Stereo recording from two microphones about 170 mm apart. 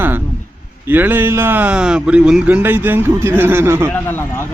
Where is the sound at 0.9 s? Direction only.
10° right (ahead or behind).